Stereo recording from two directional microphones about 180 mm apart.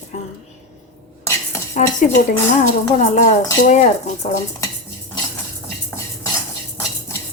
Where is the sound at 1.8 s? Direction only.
40° left (ahead or behind).